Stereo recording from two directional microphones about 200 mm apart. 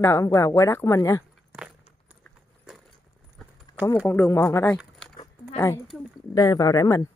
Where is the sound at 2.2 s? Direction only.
Centre (ahead or behind).